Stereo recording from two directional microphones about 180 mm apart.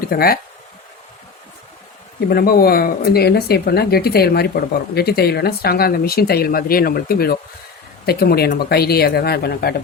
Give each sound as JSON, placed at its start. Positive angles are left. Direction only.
{"t": 0.1, "sound": "speech", "side_deg": 55}
{"t": 2.3, "sound": "speech", "side_deg": 55}